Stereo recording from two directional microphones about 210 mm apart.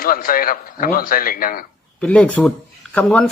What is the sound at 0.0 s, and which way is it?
A man's voice, 40° left (ahead or behind).